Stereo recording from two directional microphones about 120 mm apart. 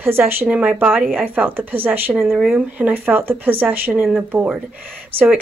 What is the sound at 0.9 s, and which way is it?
Speech, centre (ahead or behind).